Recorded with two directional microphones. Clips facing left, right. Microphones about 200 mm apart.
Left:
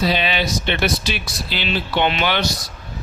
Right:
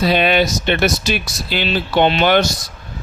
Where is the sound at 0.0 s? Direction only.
55° right (ahead or behind).